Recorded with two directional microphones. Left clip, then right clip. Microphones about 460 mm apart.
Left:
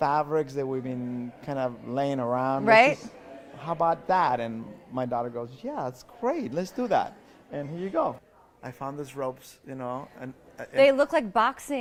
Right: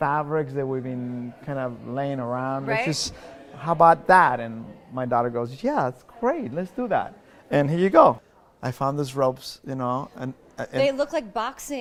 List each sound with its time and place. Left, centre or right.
0.0 s a man's voice: right
2.6 s speech: left
3.6 s a man's voice: right
6.2 s speech: centre
7.5 s speech: right
8.6 s speech: right
10.8 s a woman's voice: left